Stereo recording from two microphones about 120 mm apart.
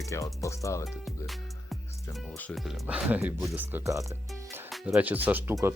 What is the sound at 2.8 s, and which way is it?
Speech, 10° right (ahead or behind).